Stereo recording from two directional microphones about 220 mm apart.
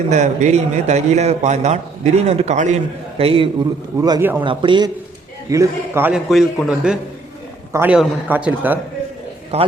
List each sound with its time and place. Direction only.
0.1 s a man's voice: 30° right (ahead or behind); by 8.8 s 5° right (ahead or behind)
9.5 s a man's voice: 30° right (ahead or behind)